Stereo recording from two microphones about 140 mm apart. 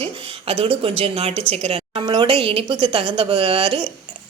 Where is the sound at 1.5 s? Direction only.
45° right (ahead or behind).